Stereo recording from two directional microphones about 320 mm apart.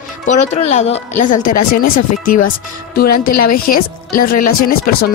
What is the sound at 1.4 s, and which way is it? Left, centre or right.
Speech, left.